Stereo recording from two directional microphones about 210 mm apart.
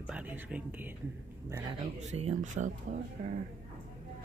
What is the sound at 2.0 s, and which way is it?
Speech, 30° right (ahead or behind).